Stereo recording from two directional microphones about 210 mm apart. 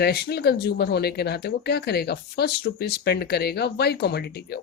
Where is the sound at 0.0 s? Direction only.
50° left (ahead or behind).